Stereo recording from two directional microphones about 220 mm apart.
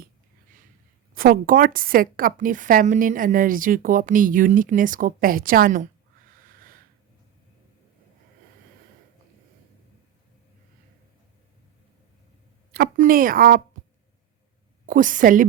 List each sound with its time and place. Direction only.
1.1 s a woman's voice: 40° right (ahead or behind)
12.7 s a woman's voice: 45° right (ahead or behind)
14.8 s a woman's voice: 35° right (ahead or behind)